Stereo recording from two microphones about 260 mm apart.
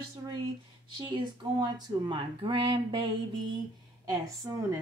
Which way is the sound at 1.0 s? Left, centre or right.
Centre.